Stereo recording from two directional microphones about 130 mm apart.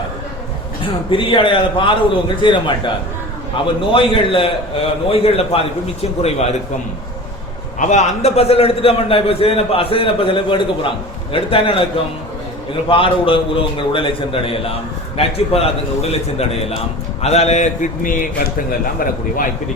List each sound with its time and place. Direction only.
1.1 s a man's voice: 40° left (ahead or behind)
7.8 s a man's voice: 65° left (ahead or behind); by 11.8 s 45° left (ahead or behind)
12.9 s a man's voice: 45° left (ahead or behind); by 18.3 s 90° left